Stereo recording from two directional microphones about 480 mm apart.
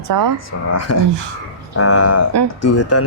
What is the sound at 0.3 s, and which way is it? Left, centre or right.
Speech, left.